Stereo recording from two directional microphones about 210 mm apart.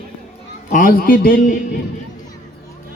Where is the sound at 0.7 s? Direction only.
40° left (ahead or behind).